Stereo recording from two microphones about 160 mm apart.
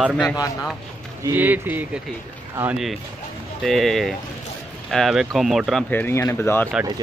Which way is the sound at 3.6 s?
Centre (ahead or behind).